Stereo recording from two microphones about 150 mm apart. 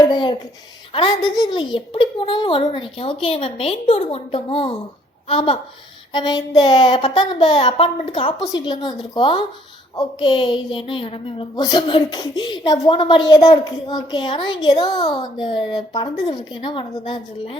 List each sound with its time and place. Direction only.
0.0 s a sound: 30° left (ahead or behind)
0.9 s a woman's voice: 30° left (ahead or behind)
6.1 s child singing: 30° left (ahead or behind)
7.2 s a woman's voice: 30° left (ahead or behind)